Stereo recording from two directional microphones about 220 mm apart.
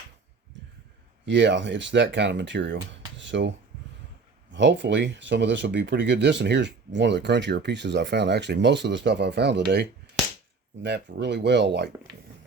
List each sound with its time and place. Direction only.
1.2 s speech: 55° right (ahead or behind)
4.5 s speech: 55° right (ahead or behind)